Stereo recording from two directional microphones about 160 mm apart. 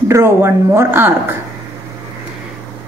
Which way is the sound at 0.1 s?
15° right (ahead or behind).